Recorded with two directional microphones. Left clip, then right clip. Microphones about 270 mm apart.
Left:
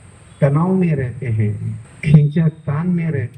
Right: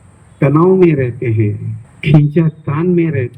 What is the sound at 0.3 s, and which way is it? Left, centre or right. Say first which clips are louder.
A man's voice: right 8 dB; right.